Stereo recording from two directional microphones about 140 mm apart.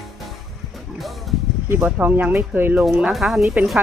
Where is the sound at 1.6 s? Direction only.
15° right (ahead or behind).